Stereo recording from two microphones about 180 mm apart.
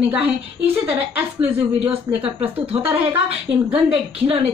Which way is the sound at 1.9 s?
30° right (ahead or behind).